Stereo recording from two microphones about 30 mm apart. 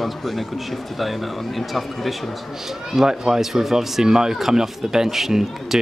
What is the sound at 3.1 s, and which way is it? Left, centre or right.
Speech, centre.